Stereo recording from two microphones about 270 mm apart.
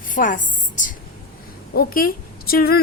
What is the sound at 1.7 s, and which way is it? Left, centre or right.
A woman's voice, left.